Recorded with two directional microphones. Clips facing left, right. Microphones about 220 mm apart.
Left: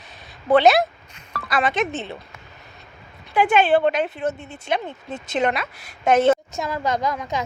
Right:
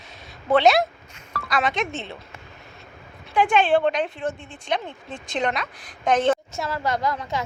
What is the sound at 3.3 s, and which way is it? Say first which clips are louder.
A woman's voice: left 2 dB; 5° left (ahead or behind).